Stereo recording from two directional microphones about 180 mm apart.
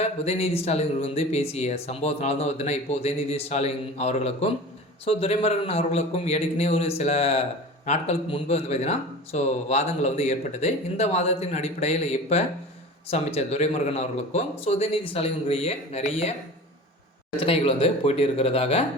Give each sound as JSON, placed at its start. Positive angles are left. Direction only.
{"t": 0.0, "sound": "speech", "side_deg": 35}
{"t": 17.4, "sound": "speech", "side_deg": 30}